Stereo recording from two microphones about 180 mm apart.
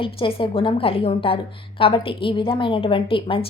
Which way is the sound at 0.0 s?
30° left (ahead or behind).